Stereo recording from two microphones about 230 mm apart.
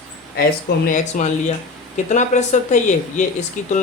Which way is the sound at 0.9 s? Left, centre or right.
Left.